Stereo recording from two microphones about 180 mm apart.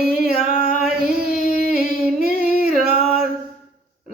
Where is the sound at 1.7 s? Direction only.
55° right (ahead or behind).